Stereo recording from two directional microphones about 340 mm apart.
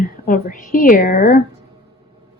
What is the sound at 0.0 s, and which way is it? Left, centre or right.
A woman's voice, left.